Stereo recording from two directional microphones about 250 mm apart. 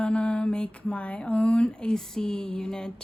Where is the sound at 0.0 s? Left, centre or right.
Centre.